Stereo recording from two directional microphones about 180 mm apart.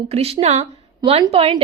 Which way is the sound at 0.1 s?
35° right (ahead or behind).